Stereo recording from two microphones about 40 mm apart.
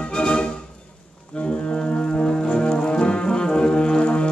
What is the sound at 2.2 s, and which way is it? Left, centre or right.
Brass instrument, left.